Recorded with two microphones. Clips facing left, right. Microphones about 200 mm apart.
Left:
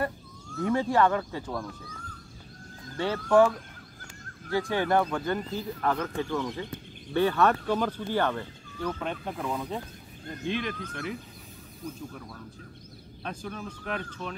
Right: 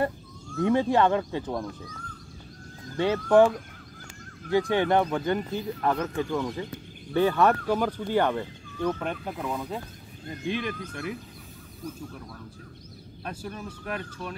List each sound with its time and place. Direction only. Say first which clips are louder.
0.6 s speech: right 2 dB; 20° right (ahead or behind)
3.0 s speech: right 2 dB; 20° right (ahead or behind)
4.5 s speech: right 3 dB; 20° right (ahead or behind)
13.2 s speech: even; 10° right (ahead or behind)